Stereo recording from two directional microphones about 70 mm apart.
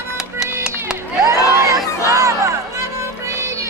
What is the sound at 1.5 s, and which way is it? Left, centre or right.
Crowd, right.